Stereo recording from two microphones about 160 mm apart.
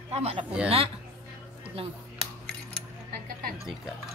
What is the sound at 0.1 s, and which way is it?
Speech, 40° right (ahead or behind).